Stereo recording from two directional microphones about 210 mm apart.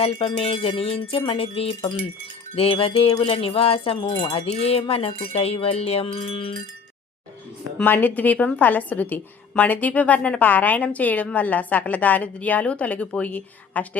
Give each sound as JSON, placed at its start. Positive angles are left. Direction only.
{"t": 0.0, "sound": "wind chime", "side_deg": 25}
{"t": 7.8, "sound": "a woman's voice", "side_deg": 10}